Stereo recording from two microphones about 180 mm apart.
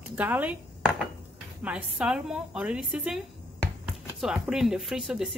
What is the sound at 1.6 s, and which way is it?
Speech, 5° right (ahead or behind).